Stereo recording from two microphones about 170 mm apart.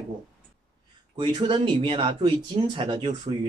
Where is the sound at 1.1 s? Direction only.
25° right (ahead or behind).